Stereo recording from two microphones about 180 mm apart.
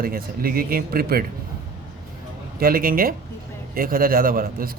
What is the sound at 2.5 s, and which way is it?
A man's voice, 55° right (ahead or behind).